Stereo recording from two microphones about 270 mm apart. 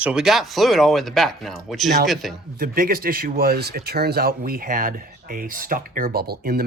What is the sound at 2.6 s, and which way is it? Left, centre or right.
Speech, right.